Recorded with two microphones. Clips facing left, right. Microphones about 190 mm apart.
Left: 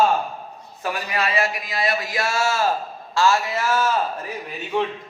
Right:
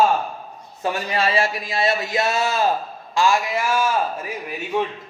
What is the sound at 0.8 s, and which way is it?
A man's voice, 25° right (ahead or behind).